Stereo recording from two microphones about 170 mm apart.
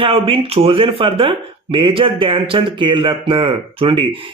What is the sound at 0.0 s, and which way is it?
Speech, 35° right (ahead or behind).